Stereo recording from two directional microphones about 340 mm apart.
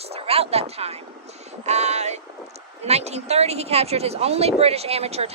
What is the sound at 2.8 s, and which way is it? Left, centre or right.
A woman's voice, centre.